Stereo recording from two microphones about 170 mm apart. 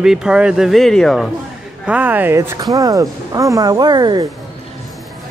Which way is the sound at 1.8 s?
10° right (ahead or behind).